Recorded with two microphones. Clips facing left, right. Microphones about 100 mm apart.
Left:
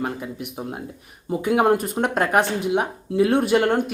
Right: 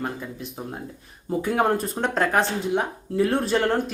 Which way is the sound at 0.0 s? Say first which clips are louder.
Left 3 dB; 15° left (ahead or behind).